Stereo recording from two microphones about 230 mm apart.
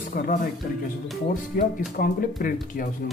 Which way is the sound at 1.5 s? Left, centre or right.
Left.